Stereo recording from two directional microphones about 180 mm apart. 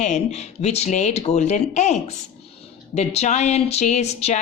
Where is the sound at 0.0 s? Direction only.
40° left (ahead or behind).